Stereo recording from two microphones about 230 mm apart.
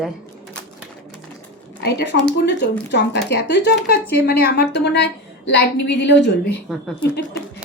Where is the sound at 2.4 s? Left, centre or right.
Left.